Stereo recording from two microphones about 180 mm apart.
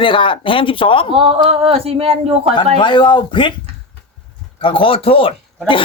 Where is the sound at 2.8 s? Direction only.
25° left (ahead or behind).